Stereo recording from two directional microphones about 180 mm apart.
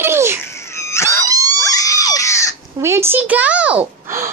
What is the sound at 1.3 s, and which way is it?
Dog, 20° right (ahead or behind).